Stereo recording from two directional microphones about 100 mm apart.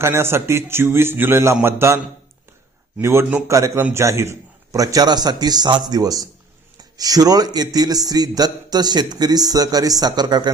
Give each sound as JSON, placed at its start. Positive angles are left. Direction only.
{"t": 0.0, "sound": "a man's voice", "side_deg": -25}
{"t": 3.0, "sound": "a man's voice", "side_deg": -25}